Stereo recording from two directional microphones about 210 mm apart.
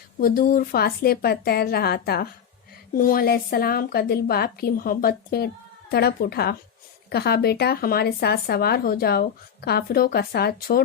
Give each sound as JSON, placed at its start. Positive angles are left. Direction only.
{"t": 0.2, "sound": "speech", "side_deg": 45}